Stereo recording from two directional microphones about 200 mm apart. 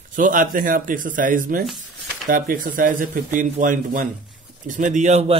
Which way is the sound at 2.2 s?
45° right (ahead or behind).